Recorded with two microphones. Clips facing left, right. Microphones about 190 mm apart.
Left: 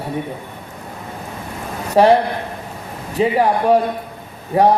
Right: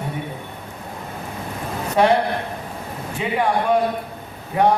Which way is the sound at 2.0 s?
35° left (ahead or behind).